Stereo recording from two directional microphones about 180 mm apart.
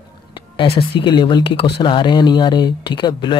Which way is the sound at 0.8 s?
25° left (ahead or behind).